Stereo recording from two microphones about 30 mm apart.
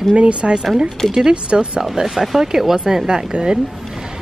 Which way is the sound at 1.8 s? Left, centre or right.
Centre.